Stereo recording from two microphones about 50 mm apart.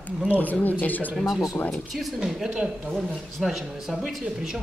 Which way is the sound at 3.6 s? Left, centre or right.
Centre.